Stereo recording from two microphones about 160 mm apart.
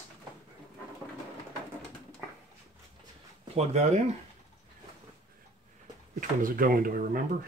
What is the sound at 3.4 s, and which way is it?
Speech, 40° right (ahead or behind).